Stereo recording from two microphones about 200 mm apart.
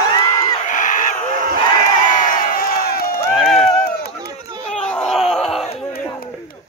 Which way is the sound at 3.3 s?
Centre (ahead or behind).